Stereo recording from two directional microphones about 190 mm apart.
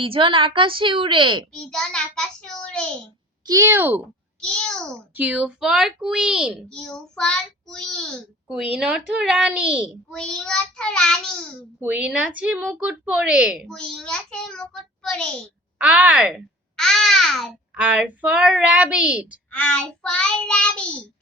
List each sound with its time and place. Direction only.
0.0 s a woman's voice: 30° right (ahead or behind)
1.7 s a child's voice: 5° left (ahead or behind)
3.4 s a child's voice: 15° right (ahead or behind)
5.1 s a child's voice: 5° right (ahead or behind)
10.1 s a child's voice: 5° left (ahead or behind)
11.8 s a child's voice: 5° right (ahead or behind)
13.7 s a child's voice: 5° left (ahead or behind)
15.8 s a child's voice: 5° right (ahead or behind)
19.5 s a child's voice: 5° left (ahead or behind)